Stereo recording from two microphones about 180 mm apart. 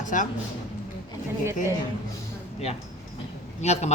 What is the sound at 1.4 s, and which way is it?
Speech, 15° right (ahead or behind).